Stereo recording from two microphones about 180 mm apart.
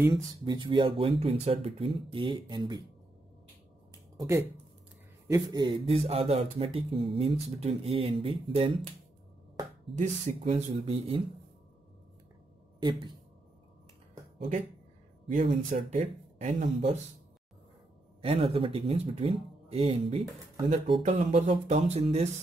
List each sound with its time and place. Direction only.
0.5 s speech: 25° right (ahead or behind)
4.2 s speech: 15° right (ahead or behind); by 8.8 s 30° right (ahead or behind)
9.9 s speech: 40° right (ahead or behind)
15.3 s speech: 45° right (ahead or behind)
18.2 s speech: 35° right (ahead or behind)